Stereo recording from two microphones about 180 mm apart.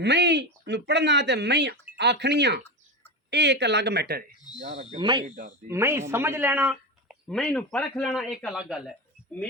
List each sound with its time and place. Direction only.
0.0 s speech: 70° right (ahead or behind)
4.9 s speech: 25° right (ahead or behind)
5.6 s speech: 15° right (ahead or behind)